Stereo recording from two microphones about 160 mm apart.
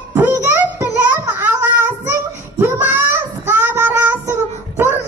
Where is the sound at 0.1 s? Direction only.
15° right (ahead or behind).